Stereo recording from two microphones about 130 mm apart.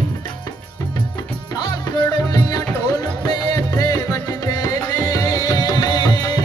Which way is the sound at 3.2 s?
30° left (ahead or behind).